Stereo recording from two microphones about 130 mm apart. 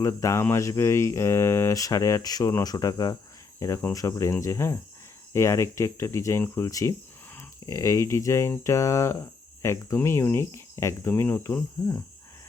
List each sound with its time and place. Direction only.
0.0 s speech: 25° left (ahead or behind)